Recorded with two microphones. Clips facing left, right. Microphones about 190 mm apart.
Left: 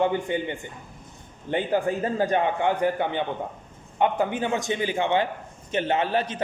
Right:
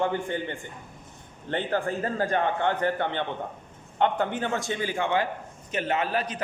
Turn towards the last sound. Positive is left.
turn(degrees=25)  # may be behind; listen again after turning